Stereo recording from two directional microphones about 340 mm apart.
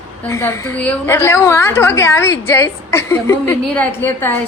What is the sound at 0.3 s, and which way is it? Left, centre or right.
A woman's voice, centre.